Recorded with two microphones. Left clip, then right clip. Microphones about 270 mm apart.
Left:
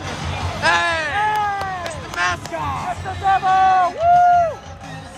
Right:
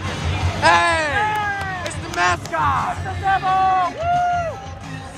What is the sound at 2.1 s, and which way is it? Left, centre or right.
Music, centre.